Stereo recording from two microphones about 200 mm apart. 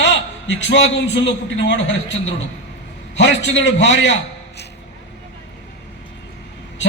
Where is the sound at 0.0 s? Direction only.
65° left (ahead or behind).